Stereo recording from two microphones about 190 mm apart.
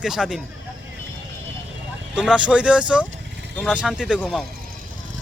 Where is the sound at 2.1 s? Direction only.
5° right (ahead or behind).